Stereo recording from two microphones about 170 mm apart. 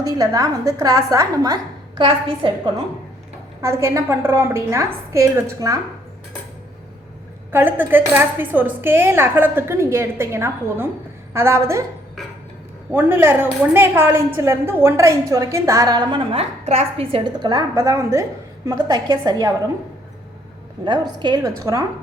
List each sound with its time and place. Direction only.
0.0 s a woman's voice: 20° right (ahead or behind)
3.6 s a woman's voice: 15° right (ahead or behind)
7.5 s a woman's voice: 10° right (ahead or behind)
12.9 s a woman's voice: 15° right (ahead or behind)
20.8 s a woman's voice: 25° right (ahead or behind)